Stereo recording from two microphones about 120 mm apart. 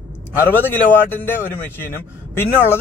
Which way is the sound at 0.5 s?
15° left (ahead or behind).